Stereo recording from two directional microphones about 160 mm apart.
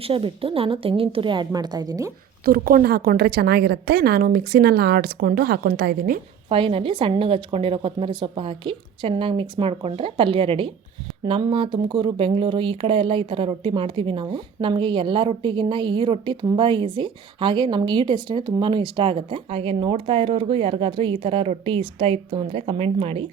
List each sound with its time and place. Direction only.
0.0 s speech: 35° right (ahead or behind)
2.4 s a woman's voice: 65° right (ahead or behind)
6.5 s speech: 35° right (ahead or behind)